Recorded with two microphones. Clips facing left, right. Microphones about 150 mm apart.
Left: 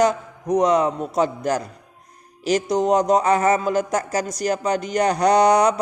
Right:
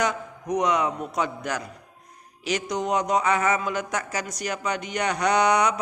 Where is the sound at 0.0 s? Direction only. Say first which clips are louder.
Left 7 dB; 35° left (ahead or behind).